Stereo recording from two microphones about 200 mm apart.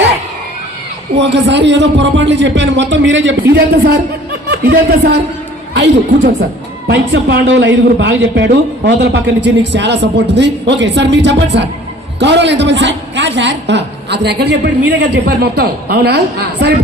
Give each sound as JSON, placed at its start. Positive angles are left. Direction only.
{"t": 1.1, "sound": "a man's voice", "side_deg": -60}